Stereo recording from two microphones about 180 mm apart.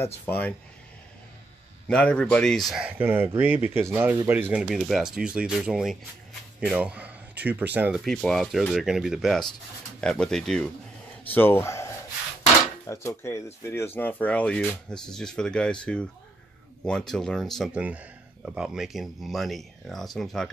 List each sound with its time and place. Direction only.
0.3 s speech: 10° left (ahead or behind)
1.9 s speech: 5° left (ahead or behind)
2.7 s speech: 10° right (ahead or behind)
8.0 s speech: centre (ahead or behind)